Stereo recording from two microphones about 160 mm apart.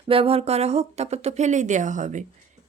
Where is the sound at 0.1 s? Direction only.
35° right (ahead or behind).